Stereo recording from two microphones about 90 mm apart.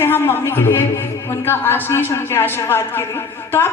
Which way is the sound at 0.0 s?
25° left (ahead or behind).